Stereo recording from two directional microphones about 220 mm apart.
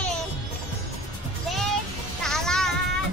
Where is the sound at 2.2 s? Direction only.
Centre (ahead or behind).